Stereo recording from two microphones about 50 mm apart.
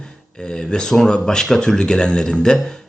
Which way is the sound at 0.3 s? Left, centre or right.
Centre.